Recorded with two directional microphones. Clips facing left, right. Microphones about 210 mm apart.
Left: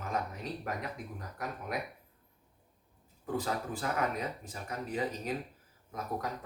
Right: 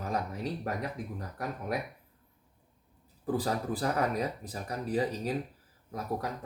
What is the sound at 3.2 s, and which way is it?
Speech, 35° right (ahead or behind).